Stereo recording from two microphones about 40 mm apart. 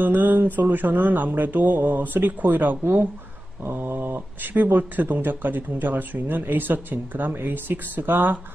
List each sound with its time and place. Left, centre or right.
0.0 s speech: right
3.6 s speech: right